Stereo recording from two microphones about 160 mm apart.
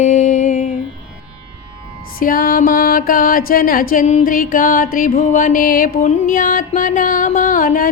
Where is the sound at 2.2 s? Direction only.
65° left (ahead or behind).